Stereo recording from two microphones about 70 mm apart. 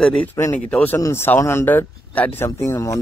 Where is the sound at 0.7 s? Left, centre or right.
Centre.